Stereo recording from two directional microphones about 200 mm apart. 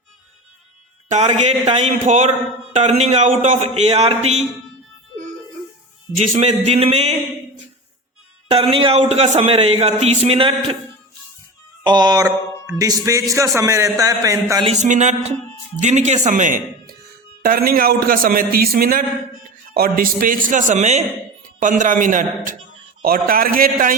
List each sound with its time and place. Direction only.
1.0 s a man's voice: 35° right (ahead or behind)
6.1 s a man's voice: 35° right (ahead or behind)
8.4 s a man's voice: 30° right (ahead or behind)
11.8 s speech: 20° right (ahead or behind)
14.5 s a man's voice: 30° right (ahead or behind)